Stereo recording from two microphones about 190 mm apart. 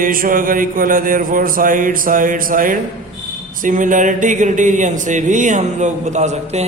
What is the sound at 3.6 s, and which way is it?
Speech, 45° right (ahead or behind).